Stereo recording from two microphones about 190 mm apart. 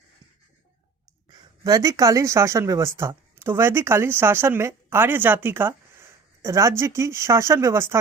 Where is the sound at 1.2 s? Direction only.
20° right (ahead or behind).